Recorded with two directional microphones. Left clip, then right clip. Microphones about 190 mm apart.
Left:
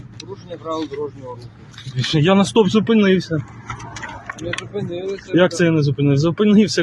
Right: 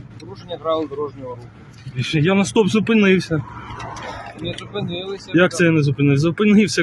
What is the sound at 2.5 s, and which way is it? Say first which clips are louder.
Speech: left 2 dB; 15° right (ahead or behind).